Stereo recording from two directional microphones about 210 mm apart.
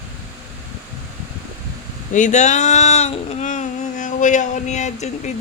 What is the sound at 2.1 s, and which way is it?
Speech, 35° left (ahead or behind).